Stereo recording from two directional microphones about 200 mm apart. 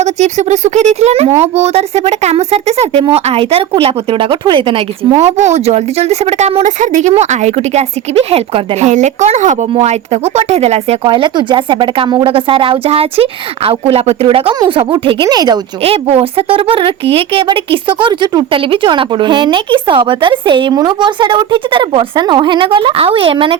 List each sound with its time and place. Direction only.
0.0 s a woman's voice: 35° right (ahead or behind)